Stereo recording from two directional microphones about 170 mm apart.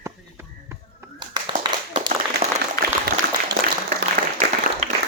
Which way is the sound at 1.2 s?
30° right (ahead or behind).